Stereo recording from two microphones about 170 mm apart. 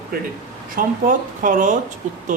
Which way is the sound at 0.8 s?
50° right (ahead or behind).